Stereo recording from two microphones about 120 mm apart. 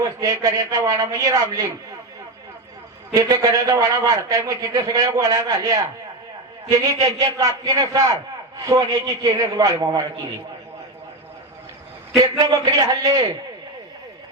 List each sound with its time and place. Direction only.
0.0 s a man's voice: 30° right (ahead or behind)
3.2 s a man's voice: 30° right (ahead or behind)
12.1 s a man's voice: 35° right (ahead or behind)